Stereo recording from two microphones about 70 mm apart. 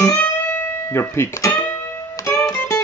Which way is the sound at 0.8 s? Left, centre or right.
Left.